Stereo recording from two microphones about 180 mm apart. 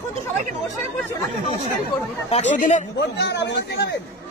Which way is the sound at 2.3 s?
40° left (ahead or behind).